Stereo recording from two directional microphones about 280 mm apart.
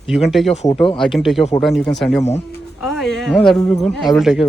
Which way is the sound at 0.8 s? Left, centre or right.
Centre.